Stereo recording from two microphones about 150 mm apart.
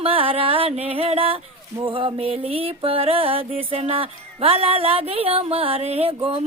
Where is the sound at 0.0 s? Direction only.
40° right (ahead or behind).